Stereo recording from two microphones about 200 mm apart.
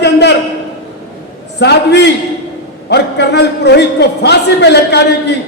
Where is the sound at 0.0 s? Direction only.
55° left (ahead or behind).